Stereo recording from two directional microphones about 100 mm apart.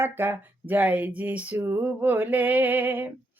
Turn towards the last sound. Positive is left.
turn(degrees=-20)  # may be behind; listen again after turning